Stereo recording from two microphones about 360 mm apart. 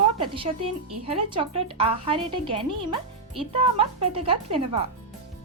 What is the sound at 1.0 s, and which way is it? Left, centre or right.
Speech, centre.